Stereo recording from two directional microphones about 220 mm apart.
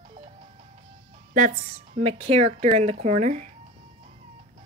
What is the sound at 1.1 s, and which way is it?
A woman's voice, 35° right (ahead or behind).